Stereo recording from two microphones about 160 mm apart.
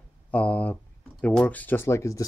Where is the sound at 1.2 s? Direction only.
10° left (ahead or behind).